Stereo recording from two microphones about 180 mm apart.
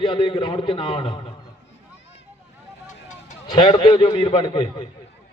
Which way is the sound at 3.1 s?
40° left (ahead or behind).